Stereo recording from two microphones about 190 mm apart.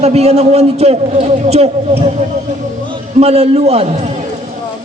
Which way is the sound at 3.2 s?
35° right (ahead or behind).